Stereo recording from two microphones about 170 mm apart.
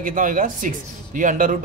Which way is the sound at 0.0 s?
50° right (ahead or behind).